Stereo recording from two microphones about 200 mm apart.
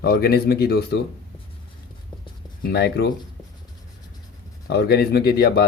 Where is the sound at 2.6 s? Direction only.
55° left (ahead or behind).